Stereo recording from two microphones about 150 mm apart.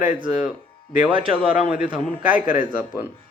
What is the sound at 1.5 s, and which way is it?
Speech, 5° right (ahead or behind).